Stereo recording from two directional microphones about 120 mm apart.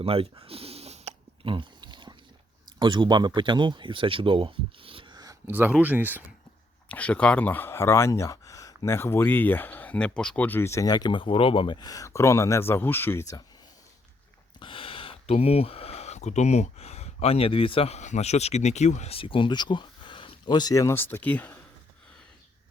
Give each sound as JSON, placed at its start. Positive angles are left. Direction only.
{"t": 0.0, "sound": "a sound", "side_deg": -55}
{"t": 1.5, "sound": "pig", "side_deg": -40}
{"t": 2.7, "sound": "speech", "side_deg": -40}
{"t": 5.5, "sound": "speech", "side_deg": -15}
{"t": 6.8, "sound": "speech", "side_deg": 10}
{"t": 14.6, "sound": "speech", "side_deg": 45}